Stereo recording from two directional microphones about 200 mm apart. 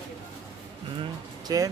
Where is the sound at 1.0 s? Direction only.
20° right (ahead or behind).